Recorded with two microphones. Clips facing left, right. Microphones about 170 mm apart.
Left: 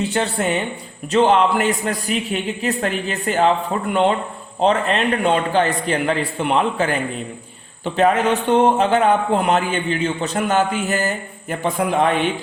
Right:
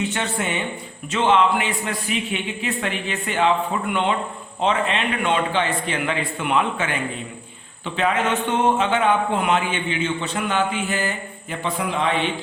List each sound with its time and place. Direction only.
0.0 s a man's voice: 35° left (ahead or behind)